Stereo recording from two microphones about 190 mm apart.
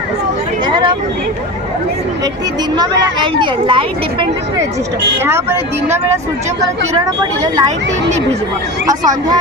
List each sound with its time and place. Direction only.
0.7 s speech: 25° right (ahead or behind)
2.7 s speech: 25° right (ahead or behind)
5.2 s a woman's voice: 15° right (ahead or behind)
7.4 s speech: 20° right (ahead or behind)
8.9 s speech: 20° right (ahead or behind)